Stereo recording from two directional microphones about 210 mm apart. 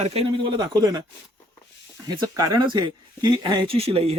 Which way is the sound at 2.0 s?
20° right (ahead or behind).